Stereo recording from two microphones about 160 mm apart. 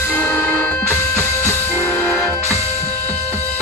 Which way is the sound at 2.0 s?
Centre (ahead or behind).